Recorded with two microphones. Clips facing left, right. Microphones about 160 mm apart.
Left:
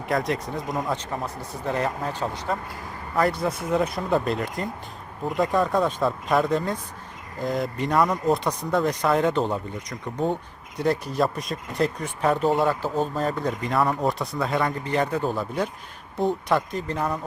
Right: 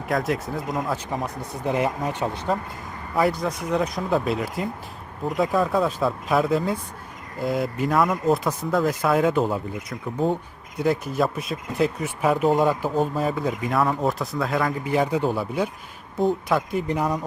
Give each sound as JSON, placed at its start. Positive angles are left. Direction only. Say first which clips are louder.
{"t": 0.1, "sound": "speech", "louder": "right 1 dB", "side_deg": 0}
{"t": 1.1, "sound": "speech", "louder": "right 2 dB", "side_deg": -15}
{"t": 2.5, "sound": "speech", "louder": "right 3 dB", "side_deg": 0}